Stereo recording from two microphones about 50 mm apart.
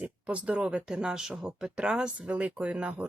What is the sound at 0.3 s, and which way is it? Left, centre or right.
Speech, right.